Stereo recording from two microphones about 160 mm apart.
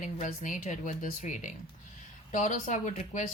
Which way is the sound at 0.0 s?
50° left (ahead or behind).